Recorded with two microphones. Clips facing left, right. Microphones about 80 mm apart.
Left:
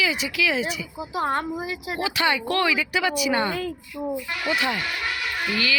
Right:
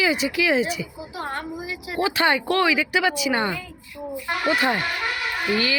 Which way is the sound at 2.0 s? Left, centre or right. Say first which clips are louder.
Right 3 dB; right.